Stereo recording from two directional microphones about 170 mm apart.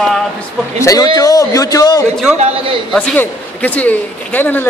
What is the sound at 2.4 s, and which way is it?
Speech, 40° right (ahead or behind).